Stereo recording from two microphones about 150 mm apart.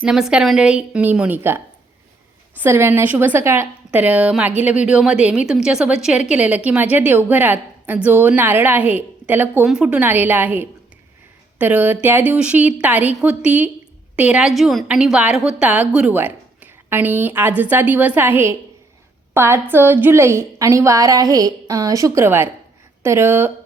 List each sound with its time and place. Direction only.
0.0 s a woman's voice: 5° right (ahead or behind)